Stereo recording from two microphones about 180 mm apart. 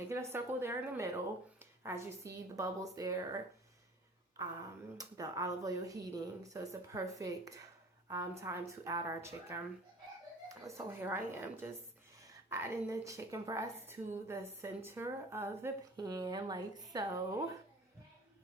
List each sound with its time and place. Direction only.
0.1 s a woman's voice: 15° right (ahead or behind)